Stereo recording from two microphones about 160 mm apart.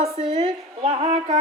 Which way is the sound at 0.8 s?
45° right (ahead or behind).